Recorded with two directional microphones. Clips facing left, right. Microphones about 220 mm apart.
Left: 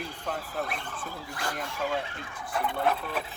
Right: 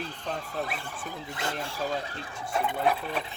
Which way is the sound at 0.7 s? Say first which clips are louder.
Even; 5° right (ahead or behind).